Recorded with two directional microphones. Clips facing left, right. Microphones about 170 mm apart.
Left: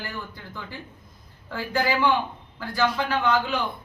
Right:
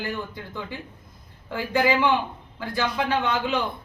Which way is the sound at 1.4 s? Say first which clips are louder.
Right 3 dB; 15° right (ahead or behind).